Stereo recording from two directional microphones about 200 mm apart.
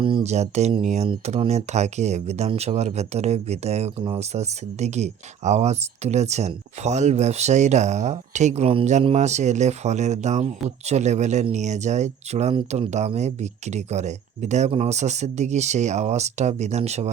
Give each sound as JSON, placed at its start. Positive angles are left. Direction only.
{"t": 0.0, "sound": "speech", "side_deg": -30}